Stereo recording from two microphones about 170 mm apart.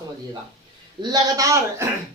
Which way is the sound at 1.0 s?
20° right (ahead or behind).